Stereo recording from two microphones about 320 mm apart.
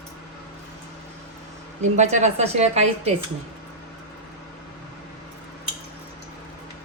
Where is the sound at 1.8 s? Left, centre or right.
Right.